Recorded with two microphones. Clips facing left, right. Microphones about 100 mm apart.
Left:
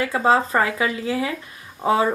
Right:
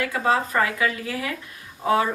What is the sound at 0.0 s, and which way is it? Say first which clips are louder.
Speech: left 4 dB; 30° left (ahead or behind).